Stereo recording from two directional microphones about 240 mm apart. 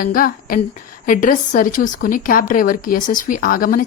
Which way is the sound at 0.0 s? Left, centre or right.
Left.